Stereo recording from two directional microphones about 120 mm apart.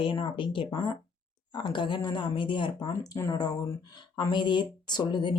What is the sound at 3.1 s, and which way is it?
Speech, 30° left (ahead or behind).